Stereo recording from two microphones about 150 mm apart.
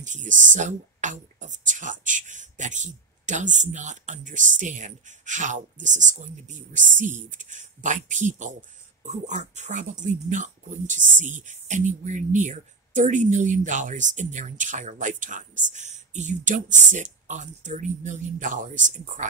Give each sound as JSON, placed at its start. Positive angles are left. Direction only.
{"t": 0.0, "sound": "speech", "side_deg": -55}